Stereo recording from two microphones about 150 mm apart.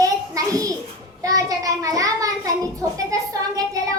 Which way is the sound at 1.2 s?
25° right (ahead or behind).